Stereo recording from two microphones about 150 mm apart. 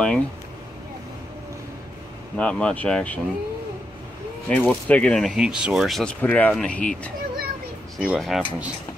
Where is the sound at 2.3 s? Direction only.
5° left (ahead or behind).